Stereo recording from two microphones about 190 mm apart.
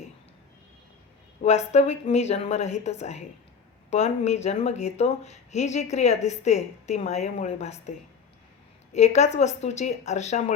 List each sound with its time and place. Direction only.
1.4 s speech: 35° left (ahead or behind)